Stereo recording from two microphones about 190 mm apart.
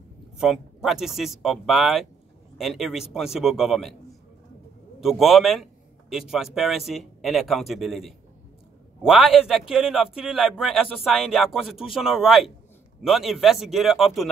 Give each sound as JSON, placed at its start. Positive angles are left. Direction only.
{"t": 0.4, "sound": "a man's voice", "side_deg": -5}
{"t": 5.0, "sound": "a man's voice", "side_deg": 0}